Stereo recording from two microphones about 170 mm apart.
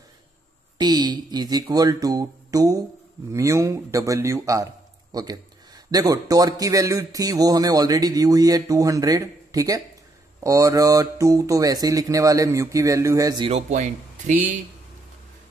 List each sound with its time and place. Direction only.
0.7 s speech: 25° right (ahead or behind)
13.5 s speech: 40° right (ahead or behind)